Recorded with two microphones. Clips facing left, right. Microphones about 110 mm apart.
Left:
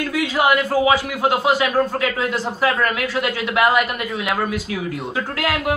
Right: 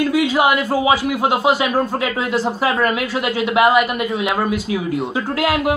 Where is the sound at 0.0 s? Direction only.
15° right (ahead or behind).